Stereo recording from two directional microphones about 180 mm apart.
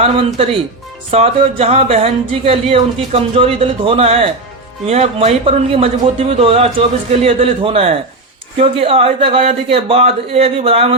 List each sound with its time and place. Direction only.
0.0 s speech: 30° right (ahead or behind)